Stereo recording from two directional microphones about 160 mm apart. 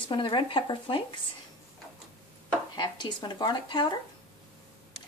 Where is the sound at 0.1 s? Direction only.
30° left (ahead or behind).